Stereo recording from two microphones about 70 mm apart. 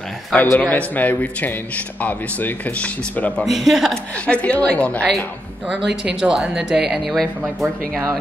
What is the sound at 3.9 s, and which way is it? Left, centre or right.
Speech, centre.